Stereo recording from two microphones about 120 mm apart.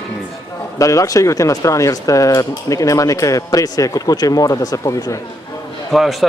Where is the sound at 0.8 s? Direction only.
25° left (ahead or behind).